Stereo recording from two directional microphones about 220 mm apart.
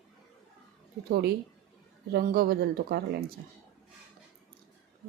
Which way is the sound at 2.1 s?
45° right (ahead or behind).